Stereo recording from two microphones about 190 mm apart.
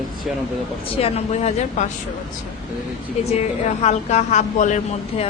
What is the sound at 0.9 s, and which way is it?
Speech, 30° left (ahead or behind).